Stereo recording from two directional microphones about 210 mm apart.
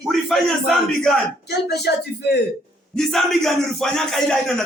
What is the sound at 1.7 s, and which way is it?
Speech, 50° left (ahead or behind).